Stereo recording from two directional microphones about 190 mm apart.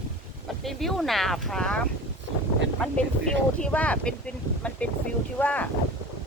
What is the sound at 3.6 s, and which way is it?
Speech, 5° left (ahead or behind).